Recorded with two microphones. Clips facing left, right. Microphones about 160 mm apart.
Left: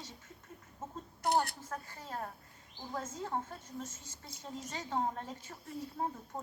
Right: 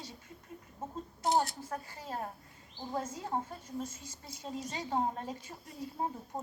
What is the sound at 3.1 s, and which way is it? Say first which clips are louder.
A woman's voice: right 2 dB; 10° right (ahead or behind).